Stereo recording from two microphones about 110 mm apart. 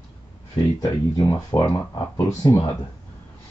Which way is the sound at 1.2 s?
30° left (ahead or behind).